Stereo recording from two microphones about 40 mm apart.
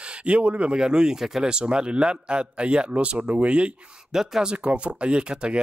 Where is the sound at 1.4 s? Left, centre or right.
Right.